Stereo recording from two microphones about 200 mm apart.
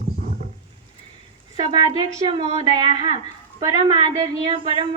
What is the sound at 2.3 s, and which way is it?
A woman's voice, 25° right (ahead or behind).